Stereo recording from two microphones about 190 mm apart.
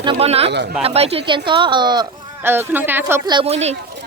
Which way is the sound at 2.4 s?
10° right (ahead or behind).